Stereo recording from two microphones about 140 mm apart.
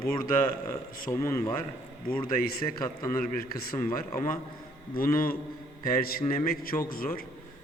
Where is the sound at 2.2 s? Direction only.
90° left.